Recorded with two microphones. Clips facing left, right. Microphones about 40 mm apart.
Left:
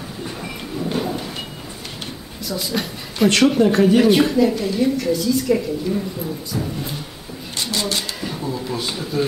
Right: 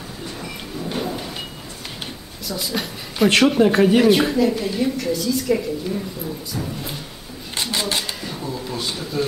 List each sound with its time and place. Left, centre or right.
0.4 s thunder: centre
2.4 s a woman's voice: centre
4.0 s a woman's voice: centre
7.5 s cash register: right
8.2 s a sound: centre